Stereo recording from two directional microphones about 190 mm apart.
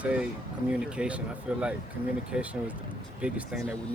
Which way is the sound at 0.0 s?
5° right (ahead or behind).